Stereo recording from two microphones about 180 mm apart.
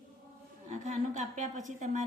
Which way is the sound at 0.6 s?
40° right (ahead or behind).